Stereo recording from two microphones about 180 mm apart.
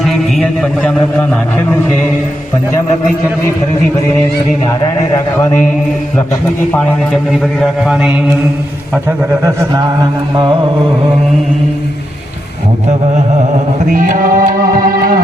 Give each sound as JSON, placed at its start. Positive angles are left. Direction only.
{"t": 0.0, "sound": "a man's voice", "side_deg": 0}
{"t": 5.1, "sound": "a man's voice", "side_deg": 15}
{"t": 7.6, "sound": "mantra", "side_deg": 0}
{"t": 9.0, "sound": "mantra", "side_deg": -15}
{"t": 13.9, "sound": "music", "side_deg": -50}